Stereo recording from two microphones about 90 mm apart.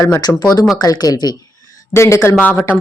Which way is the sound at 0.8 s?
45° left (ahead or behind).